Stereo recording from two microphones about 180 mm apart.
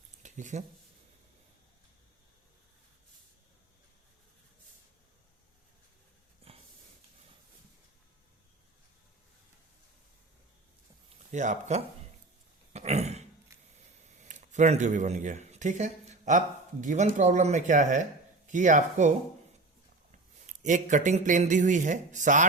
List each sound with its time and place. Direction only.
0.2 s a sound: 40° right (ahead or behind)
6.5 s a sound: 35° right (ahead or behind)
11.3 s speech: 40° right (ahead or behind)
12.7 s throat clearing: 35° right (ahead or behind)
13.7 s camera: 40° right (ahead or behind)
16.8 s speech: 45° right (ahead or behind)